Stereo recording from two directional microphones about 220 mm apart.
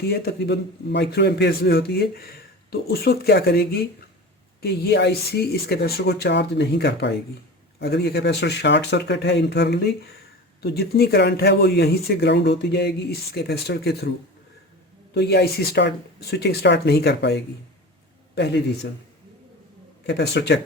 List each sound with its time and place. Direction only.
0.1 s a man's voice: 45° left (ahead or behind)
15.1 s a man's voice: 50° left (ahead or behind)
20.1 s a man's voice: 50° left (ahead or behind)